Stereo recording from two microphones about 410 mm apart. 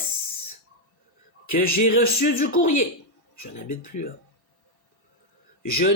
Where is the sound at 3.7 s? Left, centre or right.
Centre.